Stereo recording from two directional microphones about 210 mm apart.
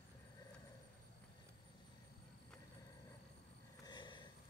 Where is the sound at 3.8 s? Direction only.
20° left (ahead or behind).